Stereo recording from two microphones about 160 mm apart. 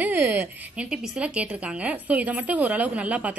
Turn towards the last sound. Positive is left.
turn(degrees=-10)  # may be behind; listen again after turning